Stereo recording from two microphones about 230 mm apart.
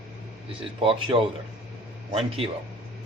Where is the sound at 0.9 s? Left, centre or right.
Right.